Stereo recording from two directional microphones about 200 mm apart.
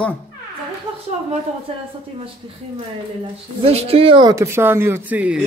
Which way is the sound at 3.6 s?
30° right (ahead or behind).